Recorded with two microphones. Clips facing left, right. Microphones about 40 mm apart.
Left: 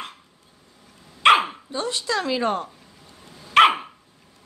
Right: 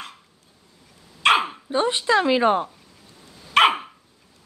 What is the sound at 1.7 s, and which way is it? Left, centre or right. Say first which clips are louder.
Speech: right 10 dB; right.